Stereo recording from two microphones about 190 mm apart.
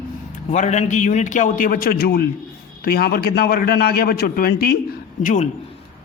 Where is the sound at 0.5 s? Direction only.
40° left (ahead or behind).